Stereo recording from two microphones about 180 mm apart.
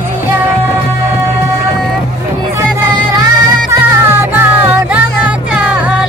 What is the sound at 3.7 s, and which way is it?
Music, 10° right (ahead or behind).